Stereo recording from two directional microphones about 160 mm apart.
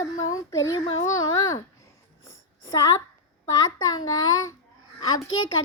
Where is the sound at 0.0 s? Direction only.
20° left (ahead or behind).